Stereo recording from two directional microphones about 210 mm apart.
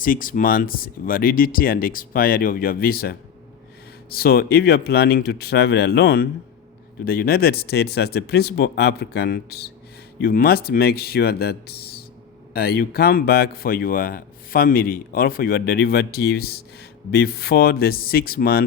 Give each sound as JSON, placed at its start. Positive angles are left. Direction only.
{"t": 0.0, "sound": "speech", "side_deg": 40}